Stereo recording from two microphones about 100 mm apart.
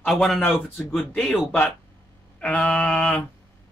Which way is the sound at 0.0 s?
5° left (ahead or behind).